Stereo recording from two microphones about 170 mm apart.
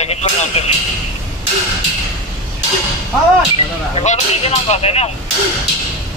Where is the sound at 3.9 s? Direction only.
40° left (ahead or behind).